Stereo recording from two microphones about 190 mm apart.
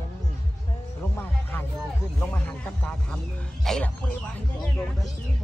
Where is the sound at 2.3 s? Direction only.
10° left (ahead or behind).